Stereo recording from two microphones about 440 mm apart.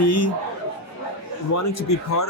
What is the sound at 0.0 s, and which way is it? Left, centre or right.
Speech, left.